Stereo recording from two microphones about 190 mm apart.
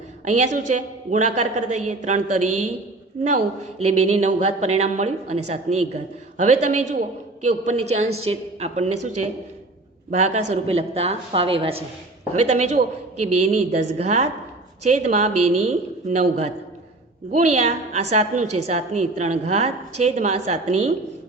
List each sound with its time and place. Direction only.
0.3 s speech: 40° right (ahead or behind)